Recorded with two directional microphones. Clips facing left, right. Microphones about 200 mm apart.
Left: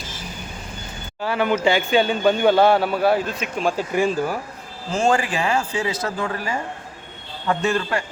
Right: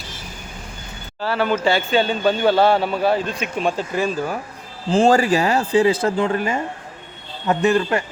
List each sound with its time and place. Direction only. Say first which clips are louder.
1.2 s a man's voice: even; 15° left (ahead or behind)
3.9 s a man's voice: left 1 dB; 15° left (ahead or behind)
4.9 s speech: right 5 dB; 35° right (ahead or behind)